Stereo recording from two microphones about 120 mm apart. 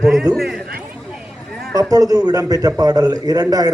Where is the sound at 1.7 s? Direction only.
30° right (ahead or behind).